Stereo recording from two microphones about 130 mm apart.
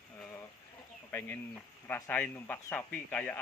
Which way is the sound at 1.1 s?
15° left (ahead or behind).